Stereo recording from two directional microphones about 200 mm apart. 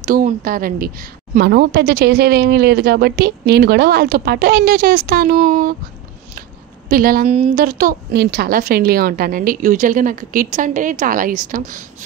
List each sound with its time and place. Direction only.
0.0 s a woman's voice: 45° right (ahead or behind)
6.9 s a woman's voice: 45° right (ahead or behind)
7.2 s a woman's voice: 35° right (ahead or behind)